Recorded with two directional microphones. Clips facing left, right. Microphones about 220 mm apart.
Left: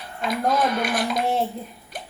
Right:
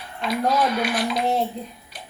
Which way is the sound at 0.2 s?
50° left (ahead or behind).